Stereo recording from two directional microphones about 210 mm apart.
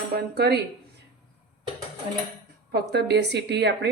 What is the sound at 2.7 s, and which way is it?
Speech, 50° right (ahead or behind).